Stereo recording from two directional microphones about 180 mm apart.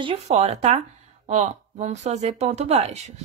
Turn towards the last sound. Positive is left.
turn(degrees=-40)  # may be behind; listen again after turning